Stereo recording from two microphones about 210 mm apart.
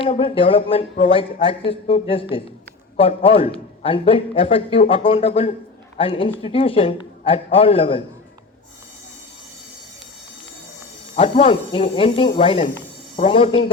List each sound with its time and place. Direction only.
0.0 s speech: 25° left (ahead or behind)
11.1 s speech: 30° left (ahead or behind)